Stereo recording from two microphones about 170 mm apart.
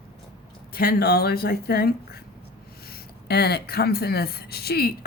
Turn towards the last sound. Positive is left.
turn(degrees=65)  # may be behind; listen again after turning